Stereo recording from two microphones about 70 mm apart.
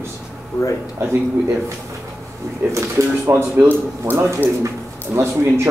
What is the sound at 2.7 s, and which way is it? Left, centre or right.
A man's voice, right.